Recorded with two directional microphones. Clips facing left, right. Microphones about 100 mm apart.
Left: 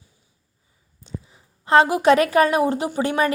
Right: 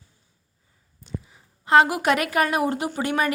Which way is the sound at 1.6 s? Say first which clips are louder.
Left 3 dB; 30° left (ahead or behind).